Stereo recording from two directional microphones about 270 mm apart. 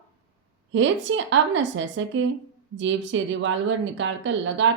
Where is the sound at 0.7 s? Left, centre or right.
Right.